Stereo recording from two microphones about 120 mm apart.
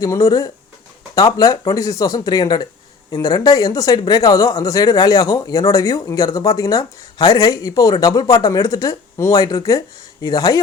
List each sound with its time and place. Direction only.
0.0 s speech: 30° left (ahead or behind)